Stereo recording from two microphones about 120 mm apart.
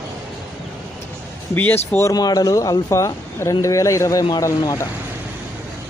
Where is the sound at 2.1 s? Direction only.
35° left (ahead or behind).